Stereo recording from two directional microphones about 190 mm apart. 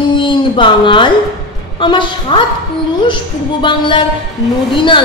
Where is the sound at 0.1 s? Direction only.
25° left (ahead or behind).